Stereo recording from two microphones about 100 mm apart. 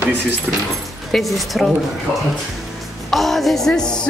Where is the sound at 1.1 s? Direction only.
Centre (ahead or behind).